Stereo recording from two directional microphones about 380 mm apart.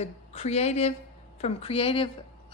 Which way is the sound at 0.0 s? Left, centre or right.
Centre.